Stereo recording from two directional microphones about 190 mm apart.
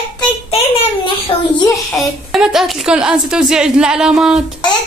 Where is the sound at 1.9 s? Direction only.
Centre (ahead or behind).